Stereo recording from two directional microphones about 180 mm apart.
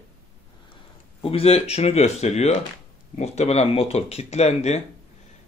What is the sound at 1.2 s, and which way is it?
Speech, 30° left (ahead or behind).